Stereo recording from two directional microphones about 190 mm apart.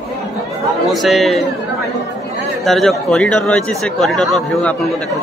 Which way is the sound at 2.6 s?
Centre (ahead or behind).